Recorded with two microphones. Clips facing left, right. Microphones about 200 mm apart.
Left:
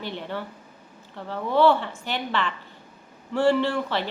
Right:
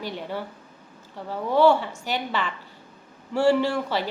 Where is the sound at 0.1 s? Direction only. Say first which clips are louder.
Right 1 dB; 10° right (ahead or behind).